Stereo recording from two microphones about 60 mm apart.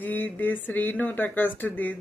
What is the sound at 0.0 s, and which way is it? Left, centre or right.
Speech, left.